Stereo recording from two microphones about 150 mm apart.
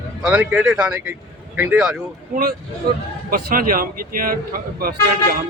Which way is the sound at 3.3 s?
70° right (ahead or behind).